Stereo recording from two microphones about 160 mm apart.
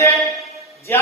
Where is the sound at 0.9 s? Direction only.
15° left (ahead or behind).